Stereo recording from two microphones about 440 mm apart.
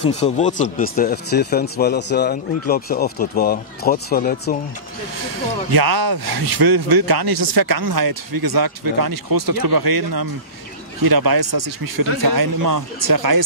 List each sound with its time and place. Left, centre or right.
0.0 s speech: centre
5.7 s speech: right